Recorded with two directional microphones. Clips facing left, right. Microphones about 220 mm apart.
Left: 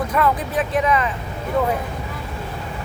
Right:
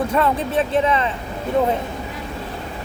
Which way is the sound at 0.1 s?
30° right (ahead or behind).